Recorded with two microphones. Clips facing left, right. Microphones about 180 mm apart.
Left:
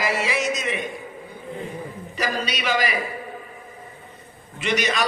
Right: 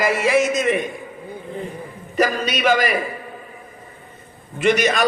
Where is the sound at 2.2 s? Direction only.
50° right (ahead or behind).